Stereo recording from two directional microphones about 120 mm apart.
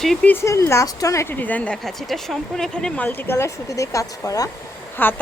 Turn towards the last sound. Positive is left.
turn(degrees=15)  # may be behind; listen again after turning